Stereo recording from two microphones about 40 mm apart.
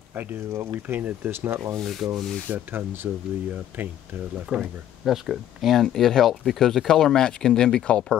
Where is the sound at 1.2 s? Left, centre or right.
Right.